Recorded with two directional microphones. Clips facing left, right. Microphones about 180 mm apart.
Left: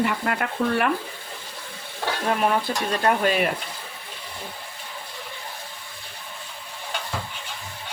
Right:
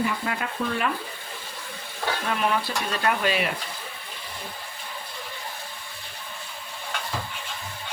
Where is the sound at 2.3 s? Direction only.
40° left (ahead or behind).